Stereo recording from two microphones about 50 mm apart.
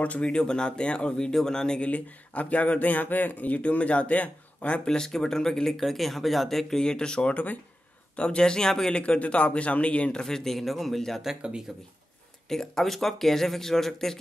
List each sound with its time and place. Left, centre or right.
0.0 s speech: left
1.9 s speech: left
4.8 s speech: centre
6.8 s speech: centre
10.2 s a man's voice: centre
11.2 s speech: centre
12.4 s speech: centre